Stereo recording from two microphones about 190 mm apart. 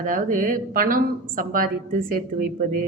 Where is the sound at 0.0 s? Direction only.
45° right (ahead or behind).